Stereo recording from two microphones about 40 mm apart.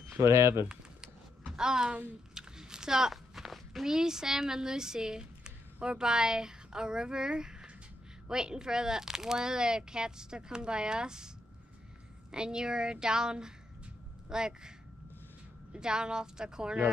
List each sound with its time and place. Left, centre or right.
1.6 s speech: centre
2.3 s walk: centre
3.8 s a woman's voice: centre
15.7 s a woman's voice: centre